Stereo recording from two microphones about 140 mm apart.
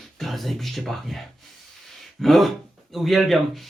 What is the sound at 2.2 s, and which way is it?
Speech, centre (ahead or behind).